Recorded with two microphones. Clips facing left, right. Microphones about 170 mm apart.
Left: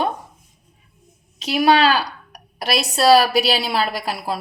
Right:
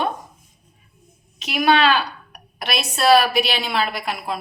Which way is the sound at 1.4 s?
35° left (ahead or behind).